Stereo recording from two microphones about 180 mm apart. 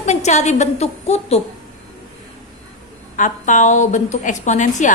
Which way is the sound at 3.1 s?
45° left (ahead or behind).